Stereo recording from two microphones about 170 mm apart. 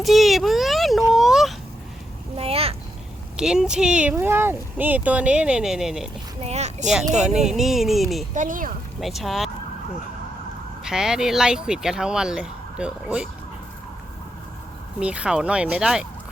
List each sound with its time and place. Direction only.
0.0 s a sound: centre (ahead or behind)
2.3 s a sound: 35° right (ahead or behind)
3.3 s speech: 5° right (ahead or behind)
6.4 s speech: 40° right (ahead or behind)
7.3 s speech: centre (ahead or behind)
8.4 s speech: 50° right (ahead or behind)
9.0 s speech: centre (ahead or behind)
10.8 s speech: 5° right (ahead or behind)
14.9 s speech: 5° right (ahead or behind)